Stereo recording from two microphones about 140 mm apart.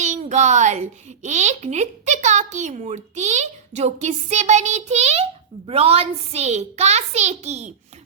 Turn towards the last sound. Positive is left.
turn(degrees=-55)  # may be behind; listen again after turning